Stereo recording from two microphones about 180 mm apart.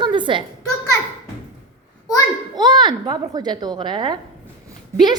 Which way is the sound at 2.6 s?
25° right (ahead or behind).